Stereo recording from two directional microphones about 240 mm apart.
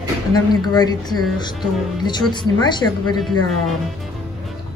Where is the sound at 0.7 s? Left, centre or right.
Centre.